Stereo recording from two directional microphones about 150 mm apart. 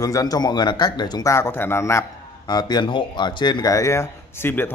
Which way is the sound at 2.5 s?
25° left (ahead or behind).